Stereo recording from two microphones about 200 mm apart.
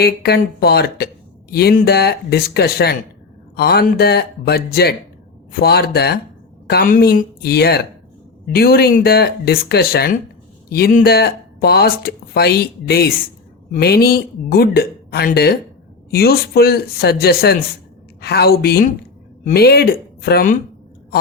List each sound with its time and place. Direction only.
0.0 s speech: 50° left (ahead or behind)